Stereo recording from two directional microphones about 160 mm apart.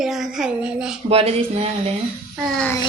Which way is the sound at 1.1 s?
40° right (ahead or behind).